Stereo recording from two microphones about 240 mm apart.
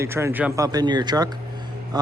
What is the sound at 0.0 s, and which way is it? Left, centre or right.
Speech, centre.